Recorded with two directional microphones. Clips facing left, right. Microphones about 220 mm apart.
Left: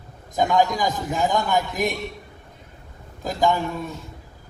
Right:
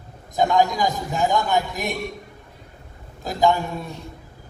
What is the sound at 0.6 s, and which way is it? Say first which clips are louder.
A man's voice: right 1 dB; 45° left (ahead or behind).